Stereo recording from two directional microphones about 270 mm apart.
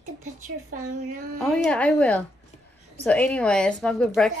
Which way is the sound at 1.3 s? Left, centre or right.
Centre.